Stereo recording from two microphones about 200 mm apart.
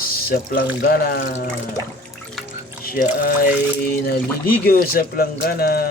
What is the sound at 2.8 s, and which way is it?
Speech, 45° left (ahead or behind).